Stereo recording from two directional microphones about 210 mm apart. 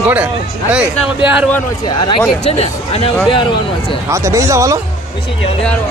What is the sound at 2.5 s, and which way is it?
Speech, 30° left (ahead or behind).